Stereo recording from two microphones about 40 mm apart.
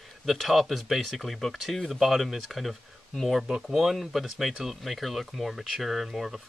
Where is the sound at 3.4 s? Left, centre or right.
Centre.